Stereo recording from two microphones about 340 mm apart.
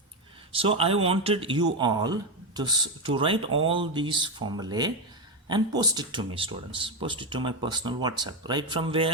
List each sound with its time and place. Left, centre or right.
0.5 s speech: centre